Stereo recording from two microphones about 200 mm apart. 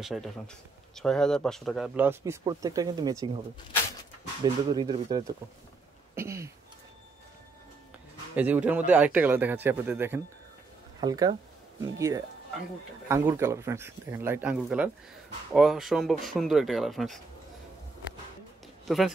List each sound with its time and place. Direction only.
0.0 s speech: centre (ahead or behind)
2.0 s a man's voice: 10° right (ahead or behind)
4.4 s speech: 20° right (ahead or behind)
6.1 s a sound: 15° right (ahead or behind)
8.4 s a man's voice: 5° right (ahead or behind)
13.1 s a man's voice: 15° right (ahead or behind)
18.9 s speech: centre (ahead or behind)